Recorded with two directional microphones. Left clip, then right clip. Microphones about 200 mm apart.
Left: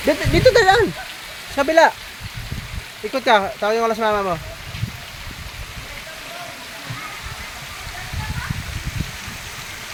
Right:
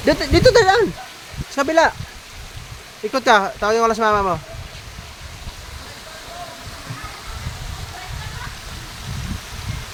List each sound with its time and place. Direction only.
0.1 s speech: 20° right (ahead or behind)
0.5 s speech: 5° left (ahead or behind)
3.1 s speech: 10° right (ahead or behind)